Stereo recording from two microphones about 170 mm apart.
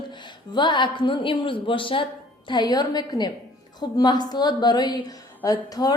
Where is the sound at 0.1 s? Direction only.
25° left (ahead or behind).